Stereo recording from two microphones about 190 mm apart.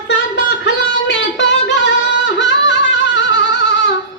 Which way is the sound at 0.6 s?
70° left (ahead or behind).